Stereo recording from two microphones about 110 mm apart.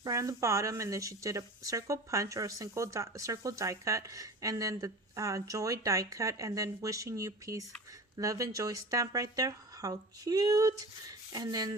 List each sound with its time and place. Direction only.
0.0 s speech: 30° right (ahead or behind)